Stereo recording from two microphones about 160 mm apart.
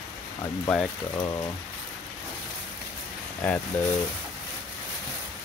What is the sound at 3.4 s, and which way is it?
Speech, 10° left (ahead or behind).